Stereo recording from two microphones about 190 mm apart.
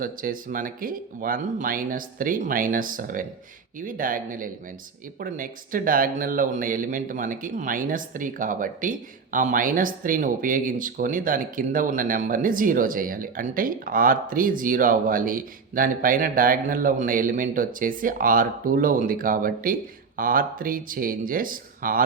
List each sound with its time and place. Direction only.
0.0 s speech: 45° right (ahead or behind)